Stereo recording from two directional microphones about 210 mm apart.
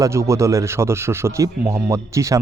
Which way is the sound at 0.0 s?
15° right (ahead or behind).